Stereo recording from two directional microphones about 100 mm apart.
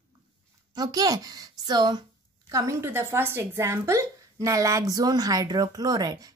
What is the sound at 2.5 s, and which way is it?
A woman's voice, 30° right (ahead or behind).